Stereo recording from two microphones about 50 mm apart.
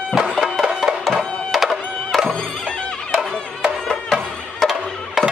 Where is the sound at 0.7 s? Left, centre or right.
Centre.